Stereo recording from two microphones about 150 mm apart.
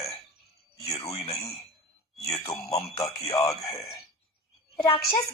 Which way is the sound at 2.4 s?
20° left (ahead or behind).